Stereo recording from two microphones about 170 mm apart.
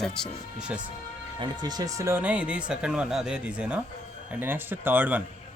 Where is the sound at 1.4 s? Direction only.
25° right (ahead or behind).